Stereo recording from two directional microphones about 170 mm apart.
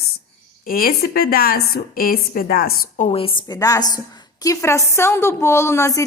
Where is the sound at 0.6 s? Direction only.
60° left (ahead or behind).